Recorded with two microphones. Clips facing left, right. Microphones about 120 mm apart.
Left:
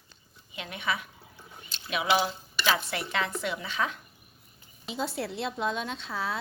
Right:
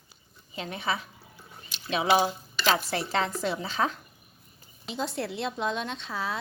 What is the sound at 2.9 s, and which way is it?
Speech, 35° right (ahead or behind).